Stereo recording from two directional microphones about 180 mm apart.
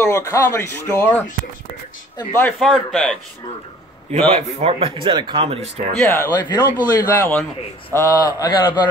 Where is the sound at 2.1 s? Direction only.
20° left (ahead or behind).